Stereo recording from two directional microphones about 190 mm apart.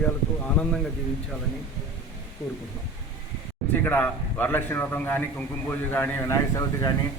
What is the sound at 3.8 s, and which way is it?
A man's voice, 10° left (ahead or behind).